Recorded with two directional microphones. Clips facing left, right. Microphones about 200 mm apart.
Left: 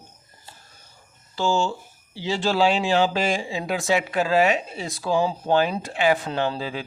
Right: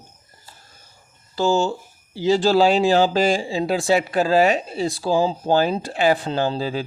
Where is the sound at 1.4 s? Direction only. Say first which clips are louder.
Right 4 dB; 40° right (ahead or behind).